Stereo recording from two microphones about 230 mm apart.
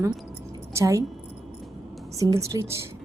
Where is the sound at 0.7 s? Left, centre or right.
Centre.